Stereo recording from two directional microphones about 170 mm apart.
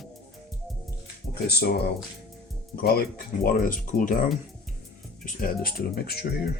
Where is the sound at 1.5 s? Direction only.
70° left (ahead or behind).